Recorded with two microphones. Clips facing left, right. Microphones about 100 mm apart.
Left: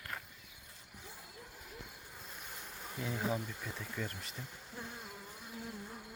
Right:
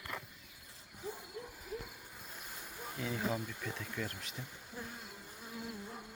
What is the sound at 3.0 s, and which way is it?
Speech, centre (ahead or behind).